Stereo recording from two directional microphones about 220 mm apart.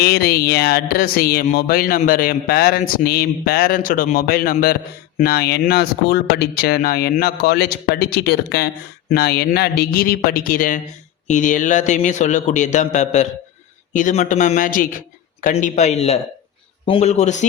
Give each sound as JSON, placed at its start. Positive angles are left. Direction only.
{"t": 0.0, "sound": "a man's voice", "side_deg": 45}